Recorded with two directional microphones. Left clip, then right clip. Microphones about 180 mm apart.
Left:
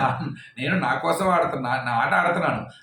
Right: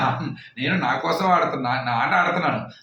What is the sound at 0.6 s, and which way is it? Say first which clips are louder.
A man's voice: right 1 dB; 15° left (ahead or behind).